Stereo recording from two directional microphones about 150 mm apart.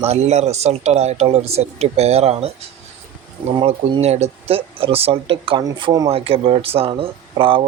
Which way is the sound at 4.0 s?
45° right (ahead or behind).